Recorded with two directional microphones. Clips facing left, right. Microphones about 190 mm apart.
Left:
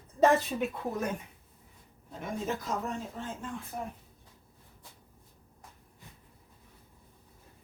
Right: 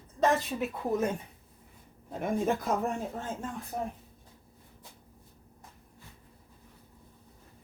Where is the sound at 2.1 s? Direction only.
55° right (ahead or behind).